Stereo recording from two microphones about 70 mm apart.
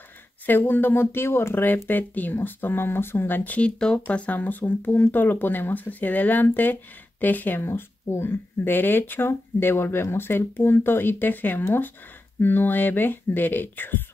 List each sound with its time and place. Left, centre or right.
0.5 s speech: left